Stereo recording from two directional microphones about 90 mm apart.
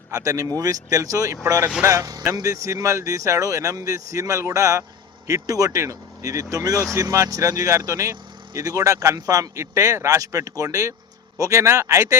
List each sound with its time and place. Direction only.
0.1 s speech: 40° right (ahead or behind)